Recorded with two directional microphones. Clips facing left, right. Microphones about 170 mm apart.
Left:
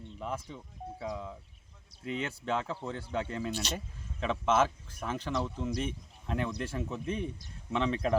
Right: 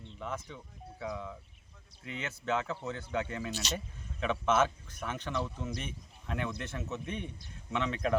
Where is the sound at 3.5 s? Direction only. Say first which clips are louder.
Left 1 dB; 55° left (ahead or behind).